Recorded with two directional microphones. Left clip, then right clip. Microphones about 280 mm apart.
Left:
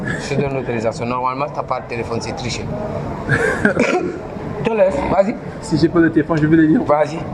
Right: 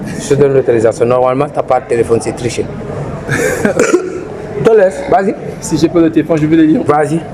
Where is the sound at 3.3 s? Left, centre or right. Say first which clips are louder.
Right 3 dB; centre.